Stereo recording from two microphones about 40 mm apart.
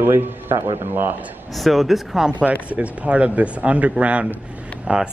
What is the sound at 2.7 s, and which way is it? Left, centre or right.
Speech, right.